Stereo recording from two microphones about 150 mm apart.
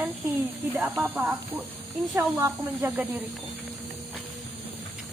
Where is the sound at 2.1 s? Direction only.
25° right (ahead or behind).